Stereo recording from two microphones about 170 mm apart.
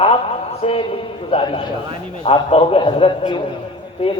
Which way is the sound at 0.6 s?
40° left (ahead or behind).